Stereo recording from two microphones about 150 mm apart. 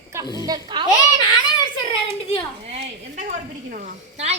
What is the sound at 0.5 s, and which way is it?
Speech, 25° right (ahead or behind).